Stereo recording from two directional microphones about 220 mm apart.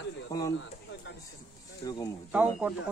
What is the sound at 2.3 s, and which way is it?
Speech, 5° right (ahead or behind).